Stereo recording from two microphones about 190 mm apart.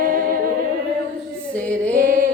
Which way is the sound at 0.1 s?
50° right (ahead or behind).